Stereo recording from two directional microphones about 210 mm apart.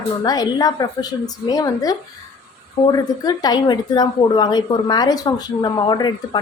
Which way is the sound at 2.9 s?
20° left (ahead or behind).